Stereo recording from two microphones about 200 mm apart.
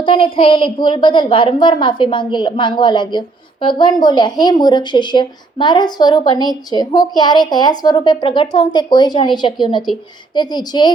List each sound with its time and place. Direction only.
0.0 s a woman's voice: 25° left (ahead or behind)